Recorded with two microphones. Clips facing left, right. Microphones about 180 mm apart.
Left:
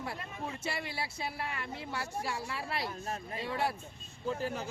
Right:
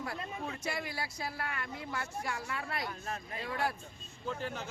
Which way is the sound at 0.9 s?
25° left (ahead or behind).